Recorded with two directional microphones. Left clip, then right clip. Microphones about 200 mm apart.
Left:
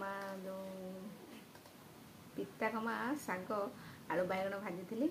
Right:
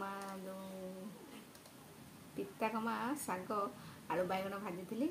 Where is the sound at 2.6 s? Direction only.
Centre (ahead or behind).